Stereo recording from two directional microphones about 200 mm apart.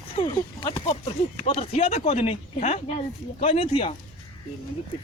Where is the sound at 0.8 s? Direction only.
30° left (ahead or behind).